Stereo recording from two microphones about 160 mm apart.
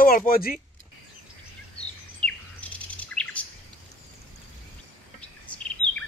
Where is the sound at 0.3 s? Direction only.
65° left (ahead or behind).